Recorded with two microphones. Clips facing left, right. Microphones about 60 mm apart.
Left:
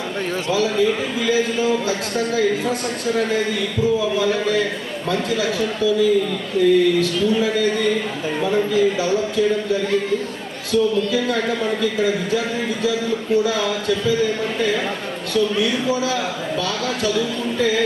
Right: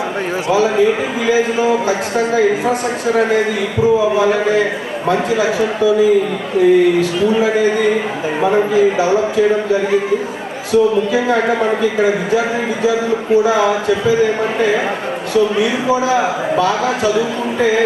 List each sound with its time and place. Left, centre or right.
0.5 s speech: right
2.6 s speech: right